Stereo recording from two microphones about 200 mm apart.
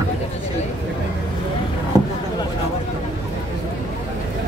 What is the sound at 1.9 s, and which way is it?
Vehicle, 20° right (ahead or behind).